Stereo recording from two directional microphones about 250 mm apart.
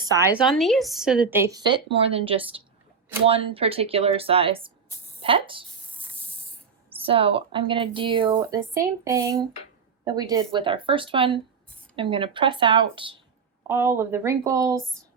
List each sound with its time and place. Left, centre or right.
0.0 s a woman's voice: centre
7.0 s a woman's voice: right
13.7 s a woman's voice: centre